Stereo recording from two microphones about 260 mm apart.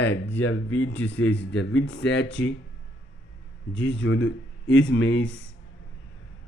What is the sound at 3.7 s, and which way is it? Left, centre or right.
Speech, left.